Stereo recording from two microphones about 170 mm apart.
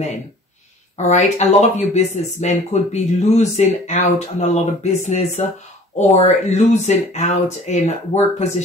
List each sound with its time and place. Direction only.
0.9 s speech: 45° left (ahead or behind)